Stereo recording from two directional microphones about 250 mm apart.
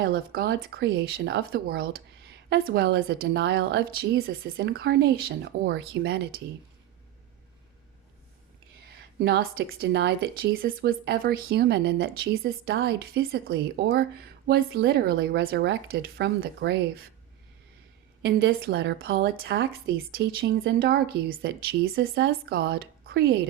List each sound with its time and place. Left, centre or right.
0.1 s speech: right
9.2 s speech: right
18.2 s speech: right